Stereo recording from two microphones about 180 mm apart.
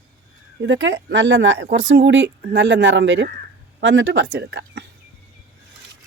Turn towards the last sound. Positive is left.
turn(degrees=-70)  # may be behind; listen again after turning